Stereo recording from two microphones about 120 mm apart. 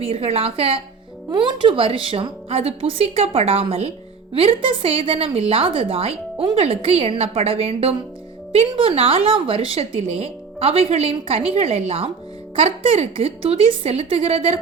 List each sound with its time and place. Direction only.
0.0 s a woman's voice: 55° right (ahead or behind)
1.3 s a woman's voice: 40° right (ahead or behind)